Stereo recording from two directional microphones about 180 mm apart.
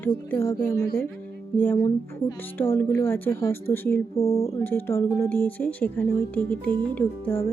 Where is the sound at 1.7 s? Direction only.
30° left (ahead or behind).